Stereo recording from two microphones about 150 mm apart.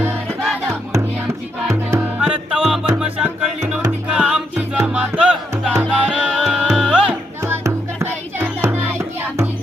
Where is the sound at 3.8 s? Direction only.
15° right (ahead or behind).